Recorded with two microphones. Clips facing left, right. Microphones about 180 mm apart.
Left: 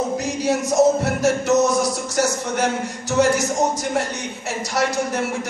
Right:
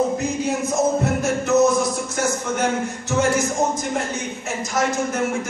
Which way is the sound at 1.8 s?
75° left (ahead or behind).